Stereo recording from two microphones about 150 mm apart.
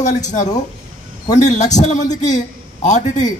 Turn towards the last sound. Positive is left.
turn(degrees=55)  # may be behind; listen again after turning